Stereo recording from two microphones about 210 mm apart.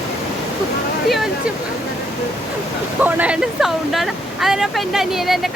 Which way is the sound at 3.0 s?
5° right (ahead or behind).